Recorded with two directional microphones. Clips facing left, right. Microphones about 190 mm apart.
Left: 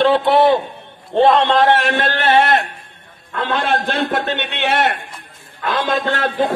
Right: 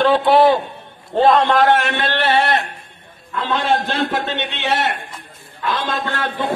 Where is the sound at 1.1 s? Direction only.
25° left (ahead or behind); by 2.7 s 45° left (ahead or behind).